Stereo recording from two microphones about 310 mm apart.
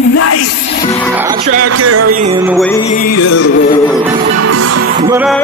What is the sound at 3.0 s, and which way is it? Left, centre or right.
Music, left.